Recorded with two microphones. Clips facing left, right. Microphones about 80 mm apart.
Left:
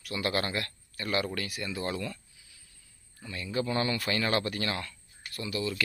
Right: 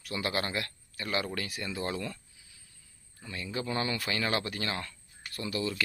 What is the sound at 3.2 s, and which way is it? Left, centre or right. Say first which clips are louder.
Speech: left 3 dB; centre.